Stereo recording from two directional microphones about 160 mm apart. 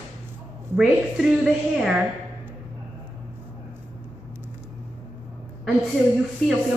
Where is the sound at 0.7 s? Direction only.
5° right (ahead or behind).